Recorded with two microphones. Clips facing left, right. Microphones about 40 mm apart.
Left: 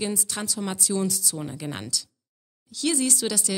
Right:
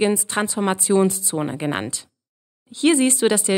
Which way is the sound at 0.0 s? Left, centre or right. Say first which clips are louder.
Right 10 dB; right.